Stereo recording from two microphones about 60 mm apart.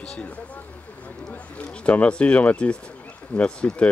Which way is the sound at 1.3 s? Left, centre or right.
Left.